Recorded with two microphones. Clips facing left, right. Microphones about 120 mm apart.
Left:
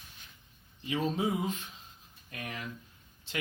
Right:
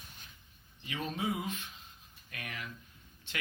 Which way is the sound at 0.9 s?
35° left (ahead or behind).